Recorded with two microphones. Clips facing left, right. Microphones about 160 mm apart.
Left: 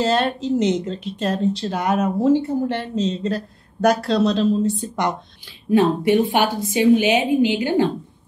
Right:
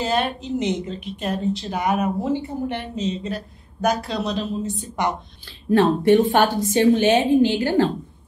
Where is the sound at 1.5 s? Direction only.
70° left (ahead or behind).